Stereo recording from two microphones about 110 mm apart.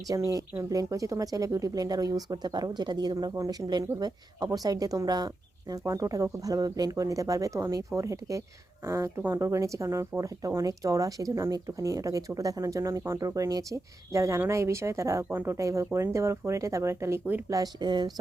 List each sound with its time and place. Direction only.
0.1 s speech: 30° right (ahead or behind)
17.5 s speech: 40° right (ahead or behind)